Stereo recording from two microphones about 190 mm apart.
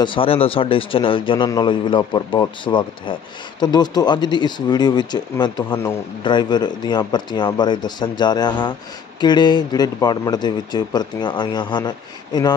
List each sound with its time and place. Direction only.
0.0 s a man's voice: 25° left (ahead or behind)